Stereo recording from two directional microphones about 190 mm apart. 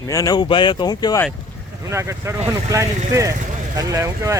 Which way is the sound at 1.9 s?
15° right (ahead or behind).